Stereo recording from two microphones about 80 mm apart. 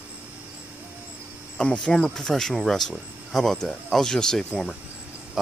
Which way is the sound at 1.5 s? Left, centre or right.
Centre.